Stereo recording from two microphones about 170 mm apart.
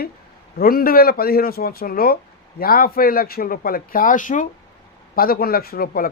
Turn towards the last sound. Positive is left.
turn(degrees=60)  # may be behind; listen again after turning